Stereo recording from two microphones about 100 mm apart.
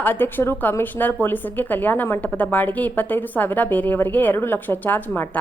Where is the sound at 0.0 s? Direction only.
20° left (ahead or behind).